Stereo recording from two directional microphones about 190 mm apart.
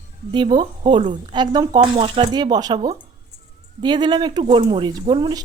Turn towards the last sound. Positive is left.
turn(degrees=-25)  # may be behind; listen again after turning